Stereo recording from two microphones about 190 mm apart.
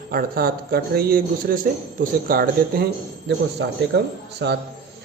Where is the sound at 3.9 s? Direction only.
60° right (ahead or behind).